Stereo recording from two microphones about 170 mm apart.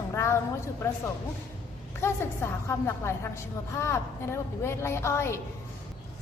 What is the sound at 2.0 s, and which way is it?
A woman's voice, 15° left (ahead or behind).